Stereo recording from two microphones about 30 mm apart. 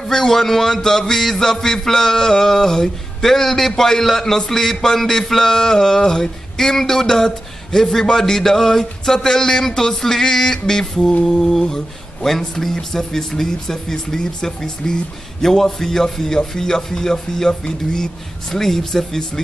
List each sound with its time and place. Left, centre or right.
0.1 s music: centre
11.2 s music: centre